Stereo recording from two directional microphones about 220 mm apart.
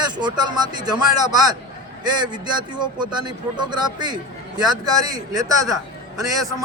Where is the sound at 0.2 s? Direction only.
20° right (ahead or behind).